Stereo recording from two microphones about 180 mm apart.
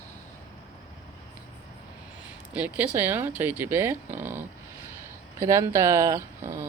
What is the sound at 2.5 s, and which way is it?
Speech, 10° right (ahead or behind).